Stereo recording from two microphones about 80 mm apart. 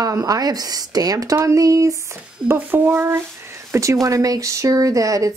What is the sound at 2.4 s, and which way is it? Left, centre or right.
A woman's voice, right.